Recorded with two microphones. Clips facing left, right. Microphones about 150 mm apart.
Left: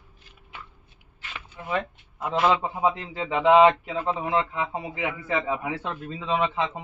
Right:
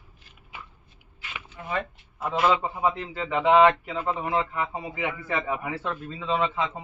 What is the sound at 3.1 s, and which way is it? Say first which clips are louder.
A man's voice: left 2 dB; 20° left (ahead or behind).